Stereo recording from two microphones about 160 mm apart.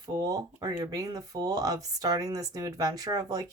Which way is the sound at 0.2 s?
25° right (ahead or behind).